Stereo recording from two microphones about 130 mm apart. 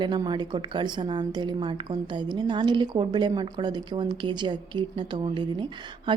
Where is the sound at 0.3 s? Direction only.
35° right (ahead or behind).